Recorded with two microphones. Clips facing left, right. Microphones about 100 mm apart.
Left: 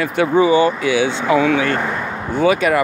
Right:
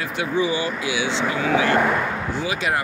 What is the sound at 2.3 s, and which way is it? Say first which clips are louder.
Speech: left 13 dB; 55° left (ahead or behind).